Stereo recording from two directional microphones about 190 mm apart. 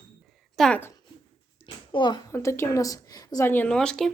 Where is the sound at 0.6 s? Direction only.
10° left (ahead or behind).